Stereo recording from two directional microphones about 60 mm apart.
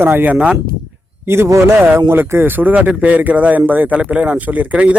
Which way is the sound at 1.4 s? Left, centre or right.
Right.